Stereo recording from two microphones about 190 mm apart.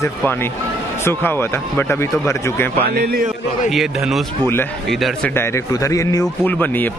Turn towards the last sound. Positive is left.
turn(degrees=10)  # may be behind; listen again after turning